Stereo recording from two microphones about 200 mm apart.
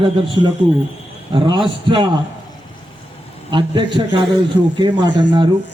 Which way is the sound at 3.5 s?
25° right (ahead or behind).